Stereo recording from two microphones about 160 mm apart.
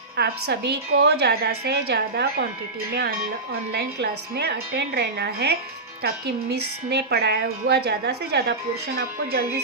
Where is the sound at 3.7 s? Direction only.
85° right.